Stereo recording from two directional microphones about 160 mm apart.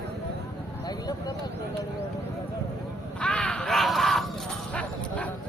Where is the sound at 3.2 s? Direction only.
5° left (ahead or behind).